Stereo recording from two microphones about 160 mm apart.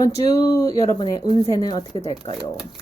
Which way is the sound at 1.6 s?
25° left (ahead or behind).